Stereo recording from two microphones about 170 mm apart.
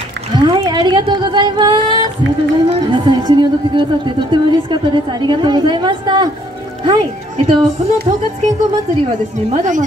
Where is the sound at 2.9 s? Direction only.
25° right (ahead or behind).